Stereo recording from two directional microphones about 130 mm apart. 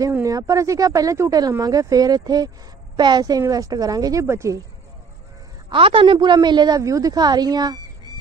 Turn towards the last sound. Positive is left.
turn(degrees=-30)  # may be behind; listen again after turning